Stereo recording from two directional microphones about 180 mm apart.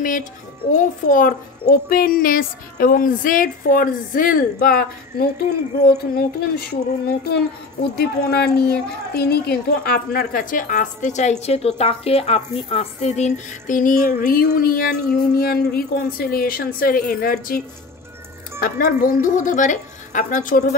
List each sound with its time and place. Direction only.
0.7 s speech: 50° left (ahead or behind)
7.9 s speech: 60° left (ahead or behind)
18.6 s speech: 50° left (ahead or behind)